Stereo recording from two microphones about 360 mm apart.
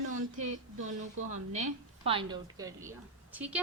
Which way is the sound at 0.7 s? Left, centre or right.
Right.